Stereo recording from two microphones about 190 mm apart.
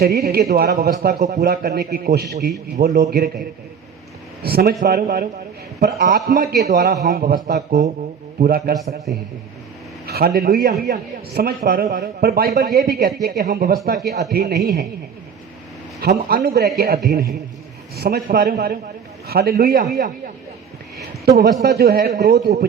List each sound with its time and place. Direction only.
0.0 s a man's voice: 55° right (ahead or behind)
4.4 s a man's voice: 55° right (ahead or behind)
10.1 s a man's voice: 55° right (ahead or behind)
16.0 s a man's voice: 50° right (ahead or behind)
21.6 s a man's voice: 55° right (ahead or behind)